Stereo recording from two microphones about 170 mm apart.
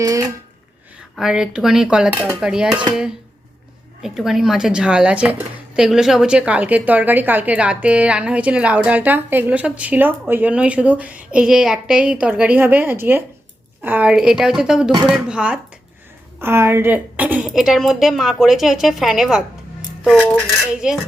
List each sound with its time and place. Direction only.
0.0 s a sound: 20° right (ahead or behind)
1.1 s a woman's voice: 5° right (ahead or behind)
20.8 s a woman's voice: 5° right (ahead or behind)